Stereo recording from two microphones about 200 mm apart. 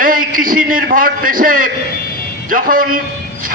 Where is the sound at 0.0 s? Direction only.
45° right (ahead or behind).